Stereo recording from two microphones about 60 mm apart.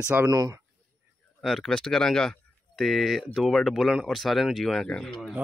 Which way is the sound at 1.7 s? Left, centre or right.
Centre.